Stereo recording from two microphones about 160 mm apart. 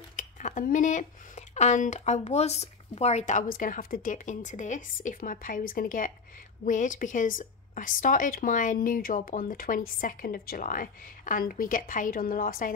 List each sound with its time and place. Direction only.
0.1 s speech: 55° left (ahead or behind)